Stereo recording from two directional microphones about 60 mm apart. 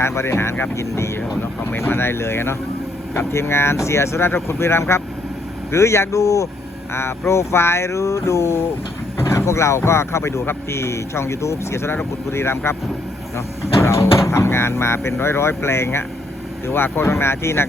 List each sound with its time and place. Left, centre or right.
0.0 s speech: left
1.4 s speech: left
6.9 s speech: left